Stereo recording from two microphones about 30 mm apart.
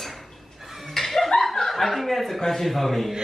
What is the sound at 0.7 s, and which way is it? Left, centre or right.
Laughter, centre.